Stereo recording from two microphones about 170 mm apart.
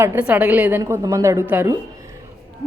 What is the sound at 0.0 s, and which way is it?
Speech, 10° right (ahead or behind).